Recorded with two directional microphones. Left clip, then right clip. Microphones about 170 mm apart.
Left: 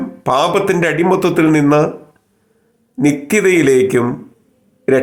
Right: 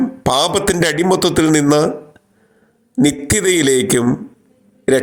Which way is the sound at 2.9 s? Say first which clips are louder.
Left 2 dB; 25° right (ahead or behind).